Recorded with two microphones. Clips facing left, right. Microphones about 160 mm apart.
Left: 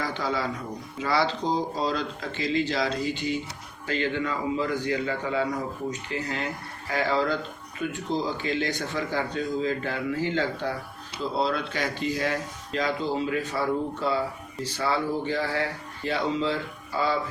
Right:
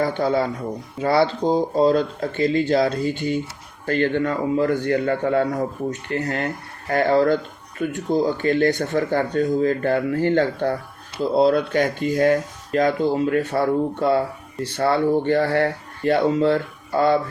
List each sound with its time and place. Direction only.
0.0 s a man's voice: 55° right (ahead or behind)